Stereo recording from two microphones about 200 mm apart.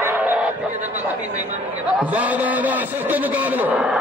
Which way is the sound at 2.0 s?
5° right (ahead or behind).